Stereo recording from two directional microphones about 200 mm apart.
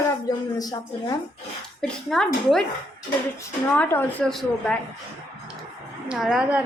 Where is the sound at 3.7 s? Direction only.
10° left (ahead or behind).